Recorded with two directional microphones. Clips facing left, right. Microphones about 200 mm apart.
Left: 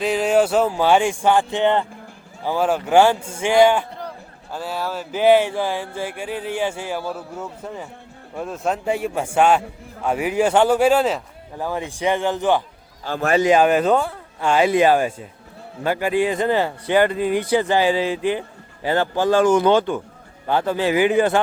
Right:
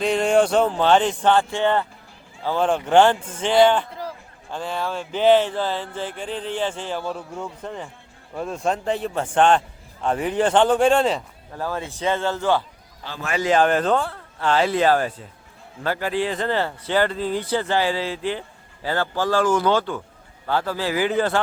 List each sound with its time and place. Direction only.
0.0 s speech: 5° left (ahead or behind)
11.5 s speech: 15° left (ahead or behind)
13.1 s a man's voice: 45° left (ahead or behind)
13.4 s speech: 10° left (ahead or behind)